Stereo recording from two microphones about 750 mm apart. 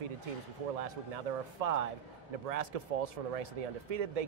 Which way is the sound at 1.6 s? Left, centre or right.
Right.